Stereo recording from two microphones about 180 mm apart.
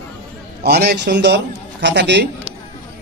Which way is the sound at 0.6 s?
65° right (ahead or behind).